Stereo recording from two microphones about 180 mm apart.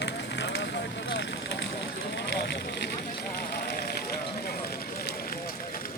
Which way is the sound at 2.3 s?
75° left (ahead or behind).